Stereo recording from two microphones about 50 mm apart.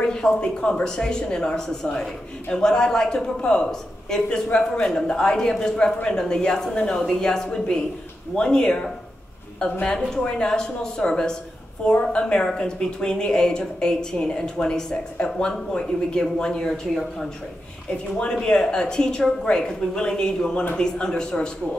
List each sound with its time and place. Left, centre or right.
0.0 s a woman's voice: centre
18.1 s a woman's voice: centre